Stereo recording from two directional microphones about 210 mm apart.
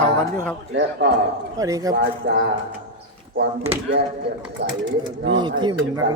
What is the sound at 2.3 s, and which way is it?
Speech, 60° right (ahead or behind).